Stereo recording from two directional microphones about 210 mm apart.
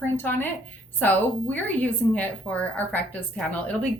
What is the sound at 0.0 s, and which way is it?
A woman's voice, 10° left (ahead or behind).